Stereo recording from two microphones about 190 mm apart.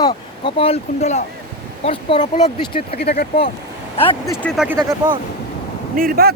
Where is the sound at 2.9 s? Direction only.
55° left (ahead or behind).